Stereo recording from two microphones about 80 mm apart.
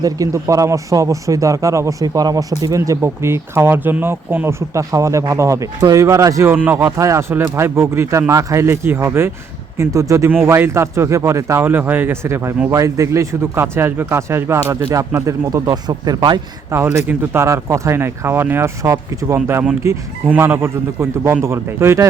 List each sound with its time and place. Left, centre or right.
0.0 s speech: right
4.7 s speech: right
9.7 s speech: right
10.2 s speech: right
11.6 s speech: right
15.6 s speech: right
16.7 s speech: right
18.8 s speech: right
20.5 s speech: right